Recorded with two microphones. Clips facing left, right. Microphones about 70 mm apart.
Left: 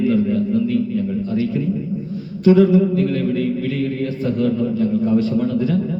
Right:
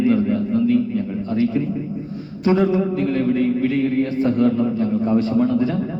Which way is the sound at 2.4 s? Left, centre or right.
Right.